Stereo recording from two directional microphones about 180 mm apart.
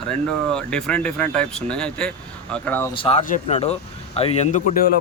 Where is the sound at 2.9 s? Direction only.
30° left (ahead or behind).